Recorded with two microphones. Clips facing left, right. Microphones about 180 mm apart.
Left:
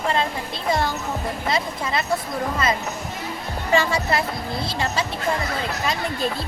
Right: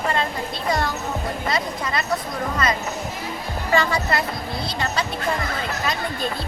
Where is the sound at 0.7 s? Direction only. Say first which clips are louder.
Left 1 dB; 25° left (ahead or behind).